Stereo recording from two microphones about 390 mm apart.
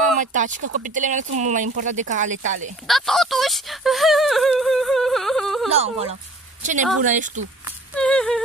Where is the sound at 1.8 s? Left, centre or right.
Centre.